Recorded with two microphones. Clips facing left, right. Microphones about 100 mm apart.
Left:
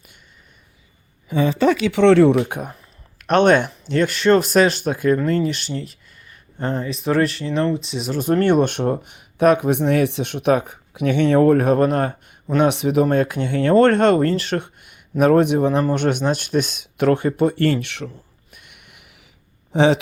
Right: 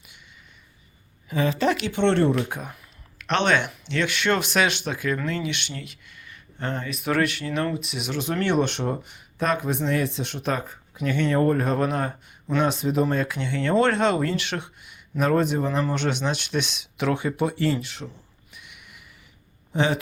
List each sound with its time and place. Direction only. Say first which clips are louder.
1.9 s speech: left 10 dB; 90° left
2.4 s speech: left 5 dB; 55° left (ahead or behind)
18.5 s a sound: even; 55° left (ahead or behind)
19.7 s speech: left 8 dB; 90° left